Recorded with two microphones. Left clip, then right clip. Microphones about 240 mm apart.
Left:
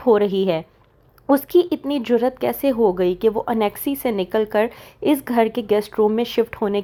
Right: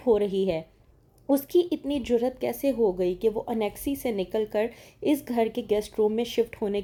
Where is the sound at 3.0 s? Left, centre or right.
Centre.